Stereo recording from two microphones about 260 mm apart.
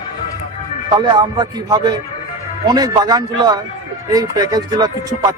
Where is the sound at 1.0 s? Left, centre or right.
Centre.